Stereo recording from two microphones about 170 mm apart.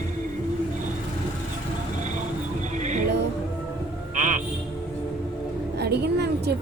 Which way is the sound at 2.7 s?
45° right (ahead or behind).